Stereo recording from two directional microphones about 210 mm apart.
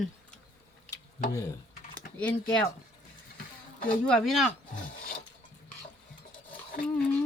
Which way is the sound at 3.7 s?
40° left (ahead or behind).